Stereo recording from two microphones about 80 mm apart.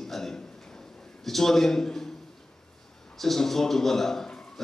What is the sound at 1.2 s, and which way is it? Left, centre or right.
Speech, centre.